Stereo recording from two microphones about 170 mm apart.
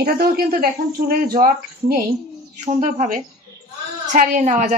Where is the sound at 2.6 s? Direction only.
45° right (ahead or behind).